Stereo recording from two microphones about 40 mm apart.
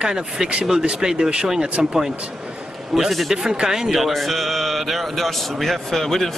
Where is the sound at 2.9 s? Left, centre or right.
Centre.